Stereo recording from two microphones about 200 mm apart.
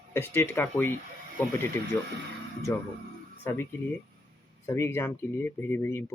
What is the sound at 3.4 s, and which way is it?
Speech, 10° left (ahead or behind).